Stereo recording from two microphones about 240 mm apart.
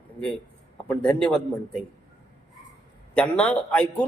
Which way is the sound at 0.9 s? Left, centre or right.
Centre.